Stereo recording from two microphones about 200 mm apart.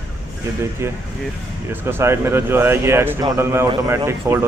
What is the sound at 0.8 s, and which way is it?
Speech, 10° right (ahead or behind).